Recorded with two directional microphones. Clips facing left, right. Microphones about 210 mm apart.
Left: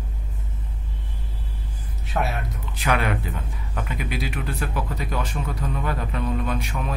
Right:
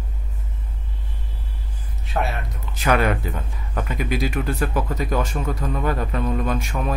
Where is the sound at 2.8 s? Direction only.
45° right (ahead or behind).